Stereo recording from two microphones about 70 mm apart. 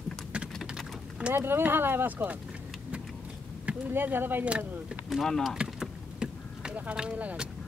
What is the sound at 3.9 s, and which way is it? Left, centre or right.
Speech, right.